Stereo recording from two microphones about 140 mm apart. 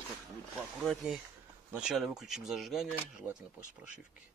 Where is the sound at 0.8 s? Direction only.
Centre (ahead or behind).